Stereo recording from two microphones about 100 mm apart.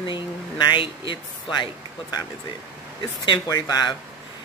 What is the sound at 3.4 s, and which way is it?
Speech, 40° left (ahead or behind).